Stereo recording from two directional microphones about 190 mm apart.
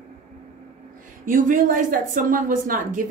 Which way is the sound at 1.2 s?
45° right (ahead or behind).